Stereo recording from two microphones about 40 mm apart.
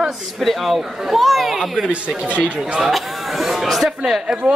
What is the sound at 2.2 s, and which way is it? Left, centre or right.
Speech, right.